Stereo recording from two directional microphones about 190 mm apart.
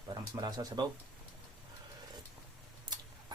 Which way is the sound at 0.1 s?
20° right (ahead or behind).